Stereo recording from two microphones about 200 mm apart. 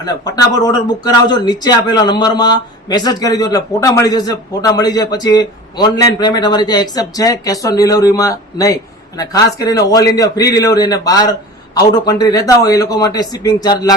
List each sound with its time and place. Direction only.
0.0 s speech: 20° left (ahead or behind)